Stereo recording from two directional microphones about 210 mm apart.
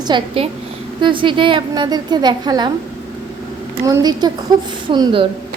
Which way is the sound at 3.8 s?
20° right (ahead or behind).